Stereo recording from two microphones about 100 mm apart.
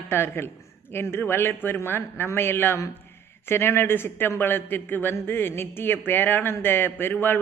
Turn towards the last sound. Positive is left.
turn(degrees=20)  # may be behind; listen again after turning